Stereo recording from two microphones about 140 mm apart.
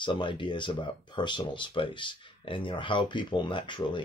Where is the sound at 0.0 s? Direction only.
35° left (ahead or behind).